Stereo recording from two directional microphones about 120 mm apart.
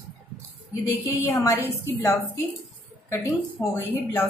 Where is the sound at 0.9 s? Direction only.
25° left (ahead or behind).